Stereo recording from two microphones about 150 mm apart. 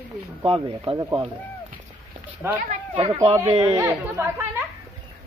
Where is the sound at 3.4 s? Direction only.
35° right (ahead or behind).